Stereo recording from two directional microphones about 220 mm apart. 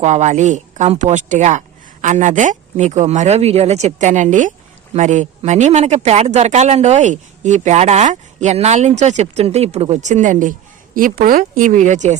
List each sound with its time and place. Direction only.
0.0 s speech: 30° right (ahead or behind)